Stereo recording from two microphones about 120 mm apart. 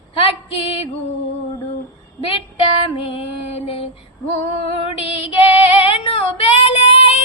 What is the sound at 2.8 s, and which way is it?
Female singing, 50° left (ahead or behind).